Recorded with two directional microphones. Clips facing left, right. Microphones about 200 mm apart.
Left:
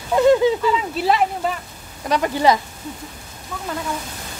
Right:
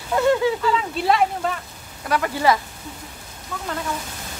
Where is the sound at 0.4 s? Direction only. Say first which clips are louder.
Left 3 dB; 20° left (ahead or behind).